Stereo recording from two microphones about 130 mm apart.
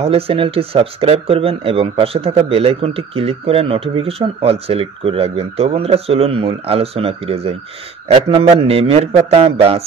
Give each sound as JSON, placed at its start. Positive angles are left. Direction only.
{"t": 0.0, "sound": "speech", "side_deg": -45}